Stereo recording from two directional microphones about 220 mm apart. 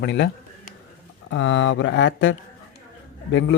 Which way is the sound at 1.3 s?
60° left (ahead or behind).